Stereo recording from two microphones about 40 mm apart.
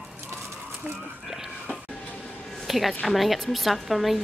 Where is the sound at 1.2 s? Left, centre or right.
Centre.